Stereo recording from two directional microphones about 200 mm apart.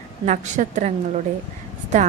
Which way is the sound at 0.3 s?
40° right (ahead or behind).